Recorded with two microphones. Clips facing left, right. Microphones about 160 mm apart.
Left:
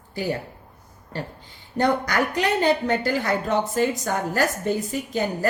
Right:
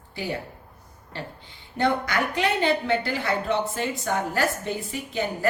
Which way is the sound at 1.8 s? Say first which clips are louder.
Left 2 dB; 40° left (ahead or behind).